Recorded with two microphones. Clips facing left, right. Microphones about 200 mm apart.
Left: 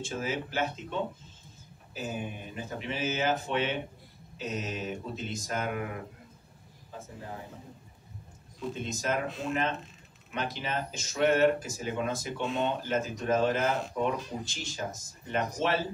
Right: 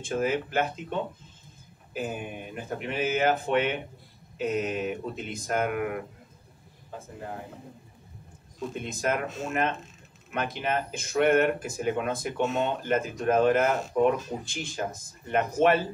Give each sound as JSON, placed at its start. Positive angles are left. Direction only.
{"t": 0.0, "sound": "speech", "side_deg": -55}
{"t": 2.0, "sound": "speech", "side_deg": -55}
{"t": 8.5, "sound": "speech", "side_deg": -55}